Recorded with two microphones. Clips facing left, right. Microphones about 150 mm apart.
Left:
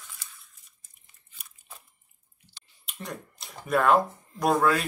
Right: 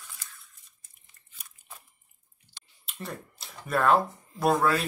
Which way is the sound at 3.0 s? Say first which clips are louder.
Even; centre (ahead or behind).